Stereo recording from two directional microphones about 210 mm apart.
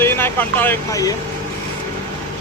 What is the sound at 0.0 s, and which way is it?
Speech, 10° left (ahead or behind).